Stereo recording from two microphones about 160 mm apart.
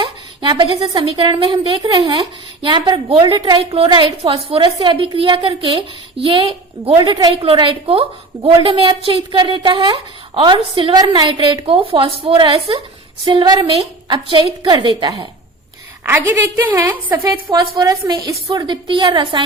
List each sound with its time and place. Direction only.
0.0 s a woman's voice: 30° right (ahead or behind)
16.0 s a woman's voice: 10° right (ahead or behind); by 19.4 s 30° right (ahead or behind)